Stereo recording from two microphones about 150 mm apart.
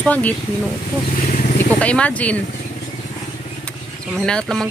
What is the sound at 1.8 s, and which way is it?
Speech, 10° left (ahead or behind).